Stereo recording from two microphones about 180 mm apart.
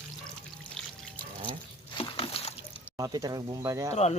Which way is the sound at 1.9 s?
30° left (ahead or behind).